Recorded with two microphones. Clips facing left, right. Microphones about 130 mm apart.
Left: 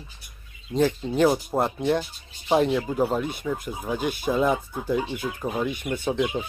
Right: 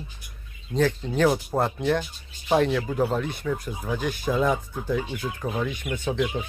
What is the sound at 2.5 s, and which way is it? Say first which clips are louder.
Speech: left 1 dB; 15° left (ahead or behind).